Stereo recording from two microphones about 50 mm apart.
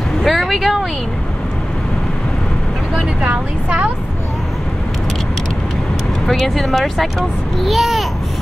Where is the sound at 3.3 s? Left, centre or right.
Right.